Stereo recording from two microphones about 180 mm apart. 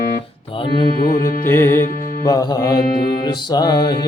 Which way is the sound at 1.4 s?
15° left (ahead or behind).